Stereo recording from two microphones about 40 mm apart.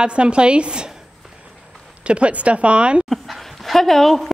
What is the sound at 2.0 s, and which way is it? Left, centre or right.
Speech, right.